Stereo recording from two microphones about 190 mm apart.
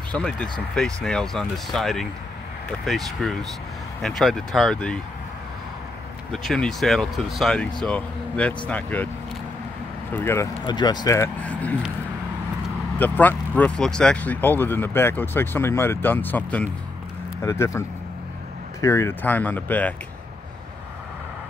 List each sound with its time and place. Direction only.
0.1 s speech: 5° left (ahead or behind)
6.3 s speech: 5° left (ahead or behind)
10.1 s speech: 15° left (ahead or behind)
13.0 s speech: 10° left (ahead or behind)